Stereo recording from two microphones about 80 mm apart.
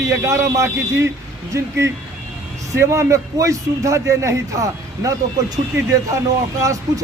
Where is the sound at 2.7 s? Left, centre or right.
Right.